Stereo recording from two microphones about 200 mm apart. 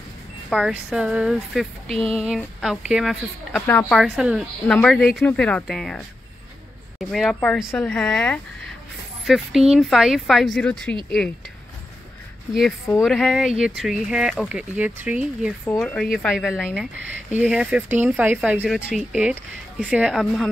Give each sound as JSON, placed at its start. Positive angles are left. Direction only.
{"t": 0.5, "sound": "speech", "side_deg": -5}
{"t": 1.9, "sound": "a sound", "side_deg": -30}
{"t": 2.1, "sound": "speech", "side_deg": 0}
{"t": 13.0, "sound": "speech", "side_deg": 0}
{"t": 15.8, "sound": "speech", "side_deg": 5}